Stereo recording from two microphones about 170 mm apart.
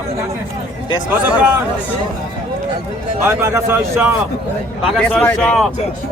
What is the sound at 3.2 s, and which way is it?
Speech, 15° right (ahead or behind).